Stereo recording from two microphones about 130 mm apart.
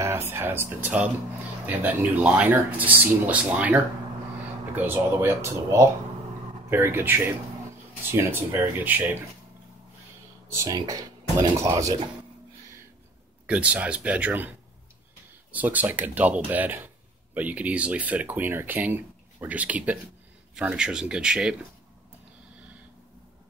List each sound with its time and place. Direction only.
0.0 s speech: 20° right (ahead or behind)
10.5 s speech: 30° right (ahead or behind)
13.5 s speech: 10° right (ahead or behind)
15.5 s speech: 10° right (ahead or behind)